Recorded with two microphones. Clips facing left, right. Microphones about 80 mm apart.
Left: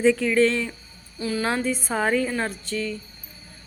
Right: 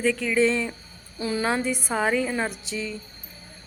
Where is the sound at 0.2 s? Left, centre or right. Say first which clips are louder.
Left 2 dB; centre.